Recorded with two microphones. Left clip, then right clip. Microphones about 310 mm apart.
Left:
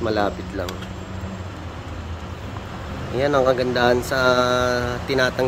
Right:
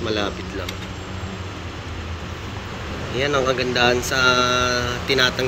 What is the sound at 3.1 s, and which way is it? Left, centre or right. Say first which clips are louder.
Speech: left 2 dB; centre.